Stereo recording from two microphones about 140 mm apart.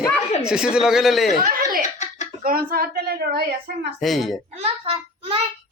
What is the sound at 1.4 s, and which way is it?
Speech, 85° right.